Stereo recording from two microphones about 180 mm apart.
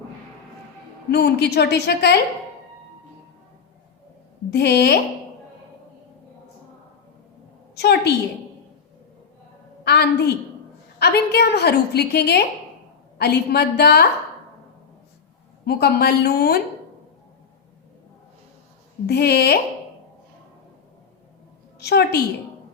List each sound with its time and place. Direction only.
1.1 s a woman's voice: 65° left (ahead or behind)
4.5 s a woman's voice: 65° left (ahead or behind)
7.8 s a woman's voice: 65° left (ahead or behind)
9.8 s a woman's voice: 65° left (ahead or behind)
15.6 s a woman's voice: 60° left (ahead or behind)
19.0 s a woman's voice: 65° left (ahead or behind)
21.8 s a woman's voice: 65° left (ahead or behind)